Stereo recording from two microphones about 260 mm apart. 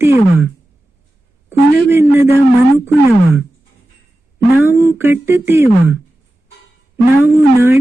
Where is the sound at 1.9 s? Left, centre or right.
Centre.